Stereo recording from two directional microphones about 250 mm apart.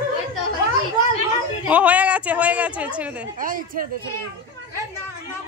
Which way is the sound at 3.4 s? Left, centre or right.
Right.